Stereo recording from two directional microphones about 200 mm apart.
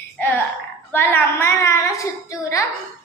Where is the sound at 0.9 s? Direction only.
10° left (ahead or behind).